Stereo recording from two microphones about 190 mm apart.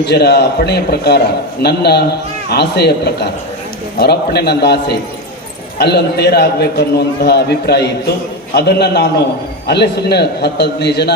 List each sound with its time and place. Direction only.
0.0 s a man's voice: 60° left (ahead or behind)